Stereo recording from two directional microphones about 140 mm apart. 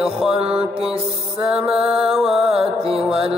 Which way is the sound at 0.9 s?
45° right (ahead or behind).